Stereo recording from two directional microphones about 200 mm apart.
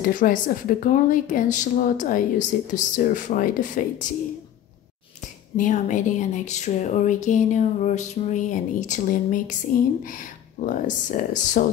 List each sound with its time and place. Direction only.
0.0 s a woman's voice: 40° left (ahead or behind)
5.6 s a woman's voice: 40° left (ahead or behind)